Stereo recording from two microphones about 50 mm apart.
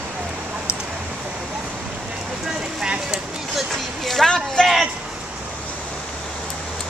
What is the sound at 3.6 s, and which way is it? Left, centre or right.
Music, centre.